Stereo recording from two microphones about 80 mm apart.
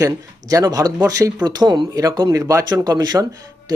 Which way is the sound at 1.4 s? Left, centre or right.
Right.